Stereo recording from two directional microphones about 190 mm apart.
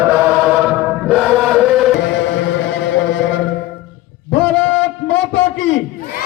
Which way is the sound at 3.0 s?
75° left (ahead or behind).